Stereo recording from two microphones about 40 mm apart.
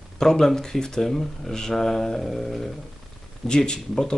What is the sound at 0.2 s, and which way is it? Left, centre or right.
Speech, centre.